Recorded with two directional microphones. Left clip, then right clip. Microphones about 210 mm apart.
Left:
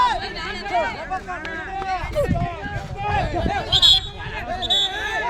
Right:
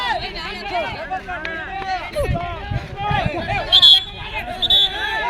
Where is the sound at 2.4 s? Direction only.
35° right (ahead or behind).